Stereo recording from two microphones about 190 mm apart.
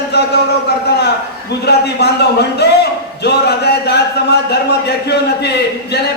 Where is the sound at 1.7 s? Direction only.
60° left (ahead or behind).